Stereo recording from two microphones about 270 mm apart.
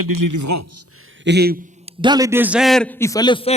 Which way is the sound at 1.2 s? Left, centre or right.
Right.